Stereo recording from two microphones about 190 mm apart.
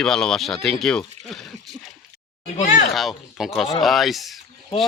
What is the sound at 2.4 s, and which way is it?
Speech, 40° left (ahead or behind).